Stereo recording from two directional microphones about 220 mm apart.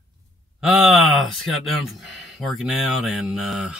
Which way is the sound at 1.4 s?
Centre (ahead or behind).